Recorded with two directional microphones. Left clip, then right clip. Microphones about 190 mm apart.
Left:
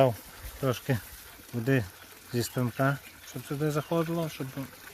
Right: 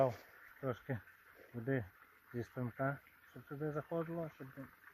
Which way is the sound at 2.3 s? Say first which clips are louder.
Left 12 dB; 10° left (ahead or behind).